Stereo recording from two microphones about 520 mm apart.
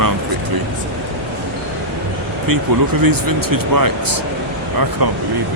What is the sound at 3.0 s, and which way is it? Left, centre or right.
Speech, right.